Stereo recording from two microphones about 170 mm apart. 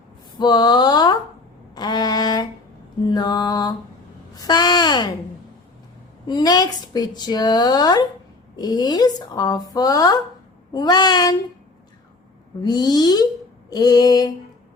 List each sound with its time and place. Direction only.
0.3 s a woman's voice: 25° left (ahead or behind)
1.7 s a sound: 25° left (ahead or behind)
3.1 s mantra: 25° left (ahead or behind)
4.4 s a woman's voice: 25° left (ahead or behind)
6.2 s a woman's voice: 25° left (ahead or behind)
12.6 s a woman's voice: 25° left (ahead or behind)